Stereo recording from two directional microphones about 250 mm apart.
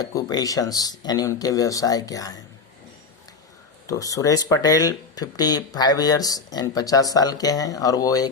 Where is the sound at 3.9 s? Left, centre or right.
Centre.